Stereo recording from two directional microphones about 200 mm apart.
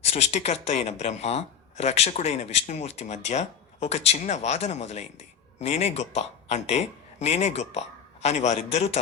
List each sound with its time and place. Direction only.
0.0 s a man's voice: 35° left (ahead or behind)